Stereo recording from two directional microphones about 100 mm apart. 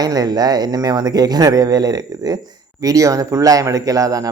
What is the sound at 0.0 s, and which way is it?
A man's voice, 40° right (ahead or behind).